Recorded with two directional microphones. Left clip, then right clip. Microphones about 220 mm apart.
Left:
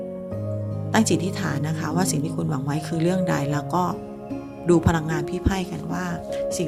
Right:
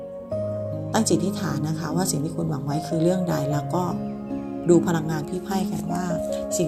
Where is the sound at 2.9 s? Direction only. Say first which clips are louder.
Even; 15° left (ahead or behind).